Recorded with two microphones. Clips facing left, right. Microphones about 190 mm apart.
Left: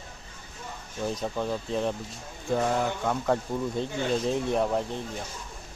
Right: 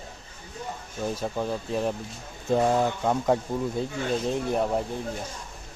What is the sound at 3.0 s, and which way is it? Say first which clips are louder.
Speech: right 3 dB; 20° right (ahead or behind).